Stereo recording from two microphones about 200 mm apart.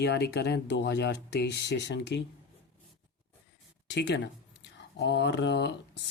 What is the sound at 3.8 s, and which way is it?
Speech, 60° left (ahead or behind).